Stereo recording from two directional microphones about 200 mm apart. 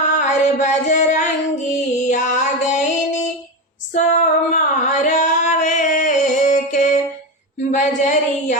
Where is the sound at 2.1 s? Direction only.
40° left (ahead or behind).